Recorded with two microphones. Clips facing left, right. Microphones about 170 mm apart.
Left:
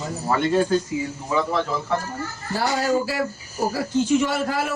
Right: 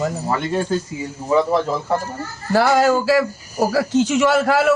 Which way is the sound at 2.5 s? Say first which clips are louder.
Right 7 dB; 85° right.